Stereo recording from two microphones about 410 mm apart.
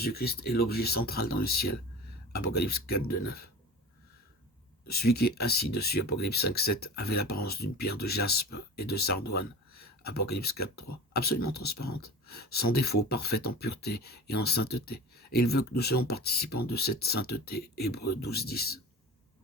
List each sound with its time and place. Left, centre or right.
0.0 s speech: left
4.9 s speech: left